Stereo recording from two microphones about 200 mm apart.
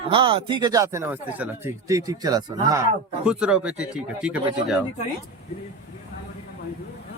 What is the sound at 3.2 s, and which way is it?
Speech, 5° right (ahead or behind).